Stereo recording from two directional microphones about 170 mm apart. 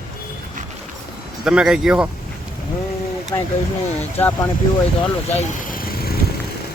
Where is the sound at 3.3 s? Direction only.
20° left (ahead or behind).